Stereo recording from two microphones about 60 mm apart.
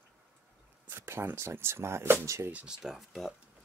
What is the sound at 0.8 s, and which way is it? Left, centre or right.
Speech, right.